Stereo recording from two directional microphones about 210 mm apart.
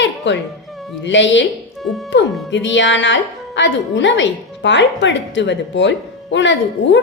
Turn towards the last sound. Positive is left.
turn(degrees=60)  # may be behind; listen again after turning